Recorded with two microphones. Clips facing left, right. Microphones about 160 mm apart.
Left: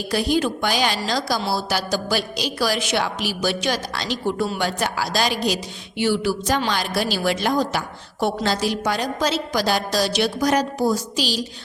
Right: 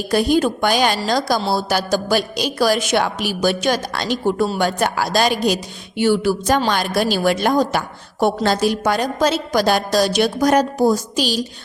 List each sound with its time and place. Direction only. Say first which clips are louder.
0.1 s a woman's voice: right 5 dB; 50° right (ahead or behind)